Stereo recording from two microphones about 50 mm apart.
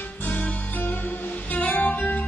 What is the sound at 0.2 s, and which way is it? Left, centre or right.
Music, left.